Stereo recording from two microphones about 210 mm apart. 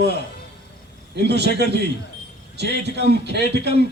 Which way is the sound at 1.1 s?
55° right (ahead or behind).